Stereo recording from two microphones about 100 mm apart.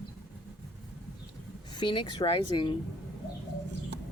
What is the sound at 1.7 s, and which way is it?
Speech, 55° left (ahead or behind).